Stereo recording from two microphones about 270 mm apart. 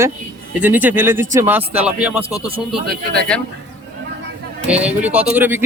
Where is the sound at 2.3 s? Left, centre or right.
Right.